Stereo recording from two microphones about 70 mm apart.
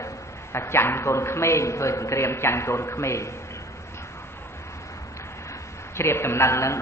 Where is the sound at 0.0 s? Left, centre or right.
Left.